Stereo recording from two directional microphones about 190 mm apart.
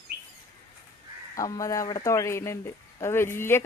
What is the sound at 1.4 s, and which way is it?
A woman's voice, 20° left (ahead or behind).